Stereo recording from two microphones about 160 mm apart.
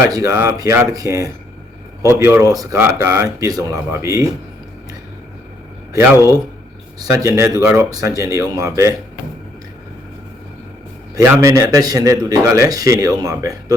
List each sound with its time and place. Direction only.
0.0 s speech: 20° right (ahead or behind)
7.0 s speech: 20° right (ahead or behind)
11.1 s speech: 20° right (ahead or behind)